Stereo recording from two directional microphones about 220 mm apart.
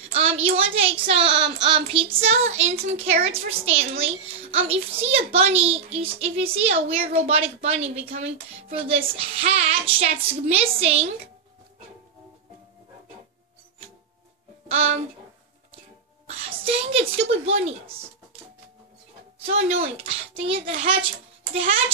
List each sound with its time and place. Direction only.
0.1 s a child's voice: 25° right (ahead or behind)
14.7 s a child's voice: 30° right (ahead or behind)
16.3 s a woman's voice: 25° right (ahead or behind)
19.4 s a child's voice: 30° right (ahead or behind)